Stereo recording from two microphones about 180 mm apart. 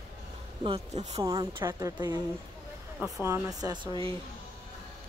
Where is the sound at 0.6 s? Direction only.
35° right (ahead or behind).